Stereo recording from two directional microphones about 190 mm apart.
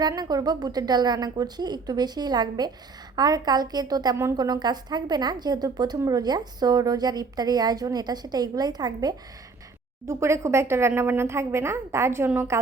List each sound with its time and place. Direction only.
0.0 s a woman's voice: 20° right (ahead or behind)